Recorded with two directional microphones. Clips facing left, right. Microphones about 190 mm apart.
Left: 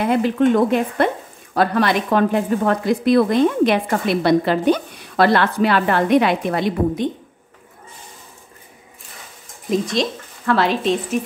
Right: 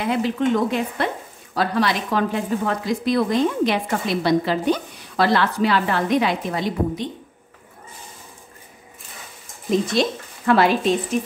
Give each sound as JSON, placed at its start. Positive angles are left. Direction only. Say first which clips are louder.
{"t": 0.0, "sound": "a woman's voice", "louder": "left 5 dB", "side_deg": 55}
{"t": 9.7, "sound": "speech", "louder": "even", "side_deg": -5}